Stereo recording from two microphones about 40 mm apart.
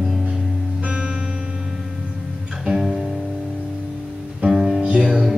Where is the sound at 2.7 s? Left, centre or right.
Centre.